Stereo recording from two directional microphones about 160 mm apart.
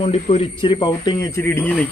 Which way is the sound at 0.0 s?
40° left (ahead or behind).